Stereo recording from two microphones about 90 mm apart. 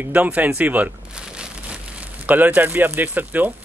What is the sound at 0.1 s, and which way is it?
Speech, 15° right (ahead or behind).